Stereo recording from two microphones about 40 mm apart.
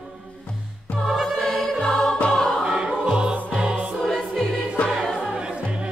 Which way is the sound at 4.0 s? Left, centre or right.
Centre.